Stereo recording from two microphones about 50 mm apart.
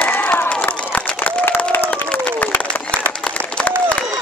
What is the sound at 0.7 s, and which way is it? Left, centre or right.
Run, left.